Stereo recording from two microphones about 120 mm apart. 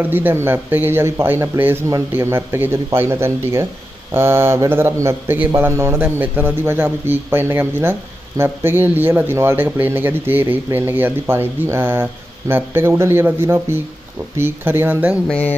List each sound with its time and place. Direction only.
0.0 s speech: 15° right (ahead or behind)
15.2 s music: 10° left (ahead or behind)